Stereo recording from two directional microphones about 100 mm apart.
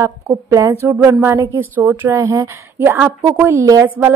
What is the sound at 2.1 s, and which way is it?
A woman's voice, 35° right (ahead or behind).